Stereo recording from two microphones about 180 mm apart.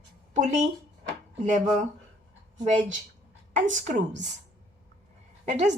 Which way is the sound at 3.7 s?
45° right (ahead or behind).